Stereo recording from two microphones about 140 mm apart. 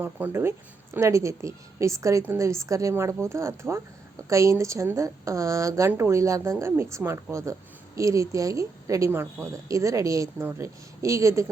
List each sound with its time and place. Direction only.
0.0 s speech: 15° right (ahead or behind)